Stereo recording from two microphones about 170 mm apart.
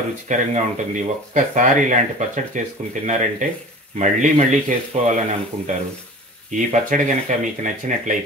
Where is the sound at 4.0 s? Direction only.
45° right (ahead or behind).